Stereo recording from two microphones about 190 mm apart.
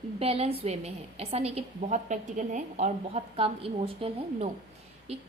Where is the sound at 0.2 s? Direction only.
30° right (ahead or behind).